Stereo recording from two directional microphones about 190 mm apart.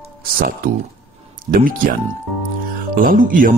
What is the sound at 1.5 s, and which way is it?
Speech, 45° right (ahead or behind).